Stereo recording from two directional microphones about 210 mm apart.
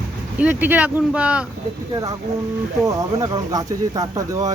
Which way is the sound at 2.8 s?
15° right (ahead or behind).